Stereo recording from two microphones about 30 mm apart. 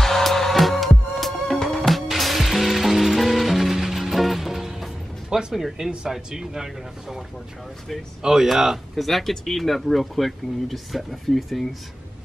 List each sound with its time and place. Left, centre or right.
0.0 s music: centre
5.5 s speech: centre
8.9 s speech: centre